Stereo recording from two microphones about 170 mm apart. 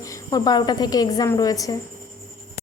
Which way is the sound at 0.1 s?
20° left (ahead or behind).